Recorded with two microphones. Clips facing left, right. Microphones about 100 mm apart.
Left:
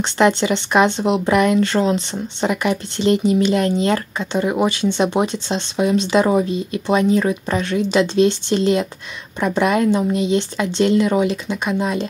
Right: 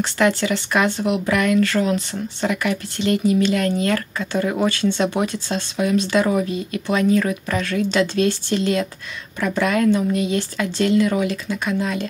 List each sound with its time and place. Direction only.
0.0 s speech: 25° left (ahead or behind)